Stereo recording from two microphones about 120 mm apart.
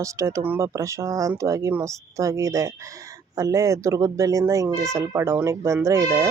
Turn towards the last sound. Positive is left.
turn(degrees=-25)  # may be behind; listen again after turning